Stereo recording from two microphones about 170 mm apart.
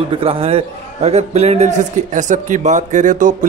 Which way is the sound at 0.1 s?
35° right (ahead or behind).